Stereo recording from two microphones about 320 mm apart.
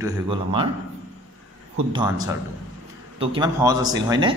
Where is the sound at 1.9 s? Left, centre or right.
Centre.